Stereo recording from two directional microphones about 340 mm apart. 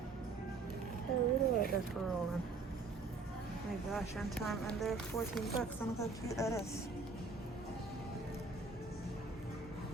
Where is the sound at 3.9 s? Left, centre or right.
Centre.